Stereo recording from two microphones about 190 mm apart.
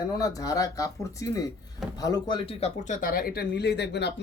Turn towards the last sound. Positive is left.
turn(degrees=65)  # may be behind; listen again after turning